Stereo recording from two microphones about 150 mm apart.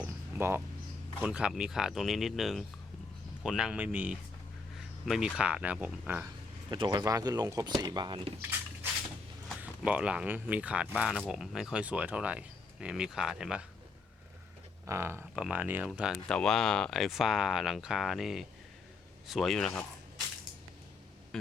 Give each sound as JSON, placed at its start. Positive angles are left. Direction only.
{"t": 0.0, "sound": "a sound", "side_deg": -15}
{"t": 1.2, "sound": "speech", "side_deg": -5}
{"t": 6.7, "sound": "speech", "side_deg": -30}
{"t": 8.4, "sound": "squish", "side_deg": -15}
{"t": 9.6, "sound": "speech", "side_deg": -10}
{"t": 14.8, "sound": "speech", "side_deg": -15}